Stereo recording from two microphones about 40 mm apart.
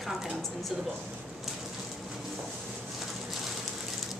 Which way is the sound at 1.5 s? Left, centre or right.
Centre.